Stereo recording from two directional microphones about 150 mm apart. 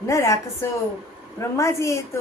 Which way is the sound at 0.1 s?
20° left (ahead or behind).